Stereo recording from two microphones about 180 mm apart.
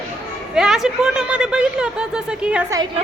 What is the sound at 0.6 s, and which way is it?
A woman's voice, 5° right (ahead or behind).